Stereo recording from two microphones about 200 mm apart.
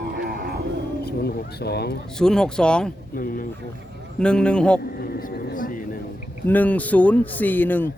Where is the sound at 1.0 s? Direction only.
50° left (ahead or behind).